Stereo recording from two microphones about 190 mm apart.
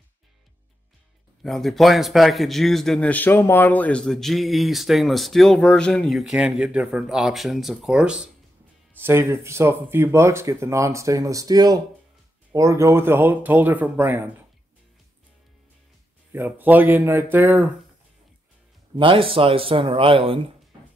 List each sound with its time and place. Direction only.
1.4 s a man's voice: centre (ahead or behind)
16.3 s speech: 10° right (ahead or behind)
18.9 s speech: 25° right (ahead or behind)